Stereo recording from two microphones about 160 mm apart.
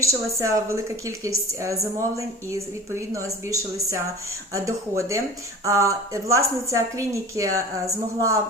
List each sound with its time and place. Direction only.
0.0 s a woman's voice: 20° right (ahead or behind)